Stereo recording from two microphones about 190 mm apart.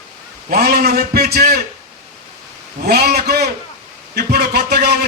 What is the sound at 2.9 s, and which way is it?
A man's voice, 55° right (ahead or behind).